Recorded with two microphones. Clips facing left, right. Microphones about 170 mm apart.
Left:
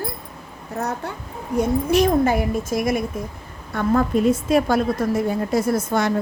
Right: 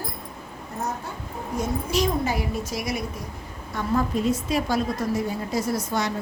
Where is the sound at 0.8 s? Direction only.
70° left (ahead or behind).